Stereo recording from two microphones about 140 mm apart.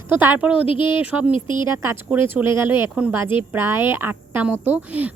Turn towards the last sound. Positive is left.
turn(degrees=-10)  # may be behind; listen again after turning